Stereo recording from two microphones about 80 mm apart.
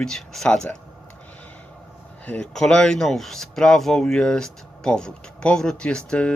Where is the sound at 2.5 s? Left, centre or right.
Centre.